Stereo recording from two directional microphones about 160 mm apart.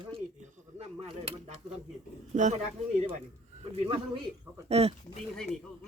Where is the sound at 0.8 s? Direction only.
40° right (ahead or behind).